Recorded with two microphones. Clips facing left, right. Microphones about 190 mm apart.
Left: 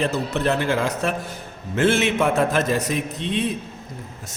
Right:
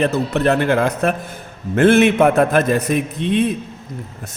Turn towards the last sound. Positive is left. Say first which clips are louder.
# right 6 dB
turn(degrees=-55)  # may be behind; listen again after turning